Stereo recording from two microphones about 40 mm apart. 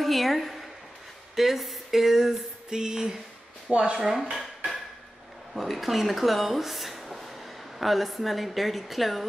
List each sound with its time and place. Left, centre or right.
0.0 s a woman's voice: centre
1.3 s a sound: centre
3.6 s speech: right
4.0 s dishes: centre
5.5 s a woman's voice: centre